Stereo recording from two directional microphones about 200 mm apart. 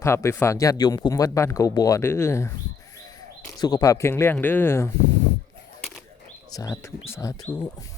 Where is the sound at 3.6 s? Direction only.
20° left (ahead or behind).